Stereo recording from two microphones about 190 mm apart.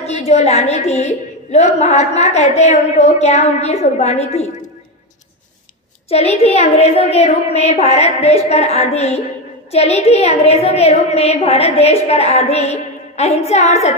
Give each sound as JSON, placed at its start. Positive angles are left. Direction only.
{"t": 0.0, "sound": "a woman's voice", "side_deg": 35}
{"t": 6.0, "sound": "a woman's voice", "side_deg": 35}